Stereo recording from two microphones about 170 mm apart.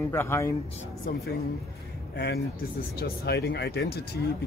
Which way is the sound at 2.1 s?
75° left (ahead or behind).